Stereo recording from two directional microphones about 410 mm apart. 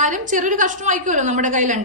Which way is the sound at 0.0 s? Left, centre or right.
Centre.